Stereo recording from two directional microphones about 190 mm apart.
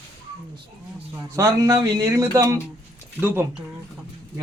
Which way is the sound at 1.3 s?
15° right (ahead or behind).